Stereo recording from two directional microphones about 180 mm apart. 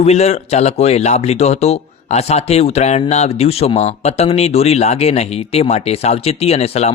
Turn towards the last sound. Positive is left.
turn(degrees=35)  # may be behind; listen again after turning